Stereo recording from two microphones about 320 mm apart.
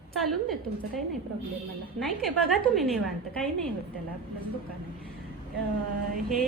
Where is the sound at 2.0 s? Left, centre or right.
Centre.